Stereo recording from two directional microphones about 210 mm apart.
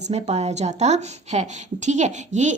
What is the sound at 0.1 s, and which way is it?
Speech, 30° right (ahead or behind).